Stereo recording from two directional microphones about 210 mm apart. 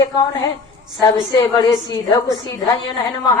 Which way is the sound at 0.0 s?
20° left (ahead or behind).